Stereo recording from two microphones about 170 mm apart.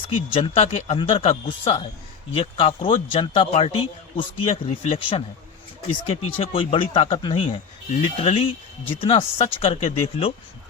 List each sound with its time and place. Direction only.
0.1 s speech: 35° left (ahead or behind)
6.2 s speech: 35° left (ahead or behind)